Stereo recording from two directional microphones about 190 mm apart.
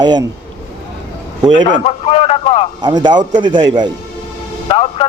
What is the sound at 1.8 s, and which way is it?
Speech, 30° left (ahead or behind).